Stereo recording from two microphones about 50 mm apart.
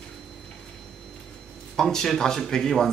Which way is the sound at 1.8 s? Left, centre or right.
Centre.